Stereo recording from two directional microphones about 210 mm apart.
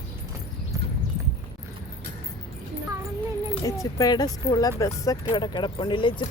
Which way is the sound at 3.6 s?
15° left (ahead or behind).